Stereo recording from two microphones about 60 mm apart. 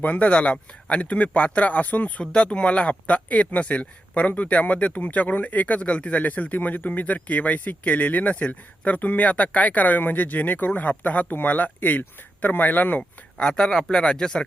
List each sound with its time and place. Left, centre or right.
0.0 s speech: left
2.2 s speech: centre
13.0 s speech: centre